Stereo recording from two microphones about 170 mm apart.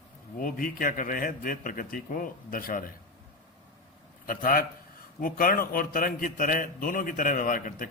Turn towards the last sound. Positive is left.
turn(degrees=55)  # may be behind; listen again after turning